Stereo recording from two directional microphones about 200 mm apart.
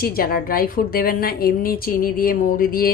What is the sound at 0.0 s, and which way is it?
Speech, 50° left (ahead or behind).